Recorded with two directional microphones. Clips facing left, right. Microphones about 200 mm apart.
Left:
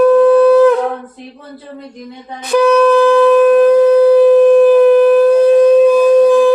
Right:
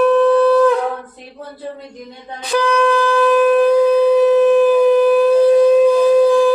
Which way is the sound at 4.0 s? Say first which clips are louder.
Left 5 dB; 5° left (ahead or behind).